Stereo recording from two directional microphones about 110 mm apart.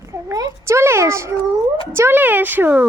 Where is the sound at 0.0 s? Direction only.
30° right (ahead or behind).